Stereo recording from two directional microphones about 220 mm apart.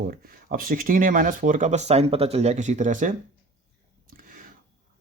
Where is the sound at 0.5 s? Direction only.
40° right (ahead or behind).